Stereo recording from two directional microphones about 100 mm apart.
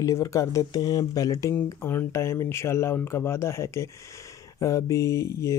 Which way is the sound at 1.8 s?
25° left (ahead or behind).